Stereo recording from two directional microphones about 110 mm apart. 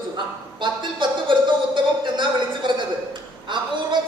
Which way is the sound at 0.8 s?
45° right (ahead or behind).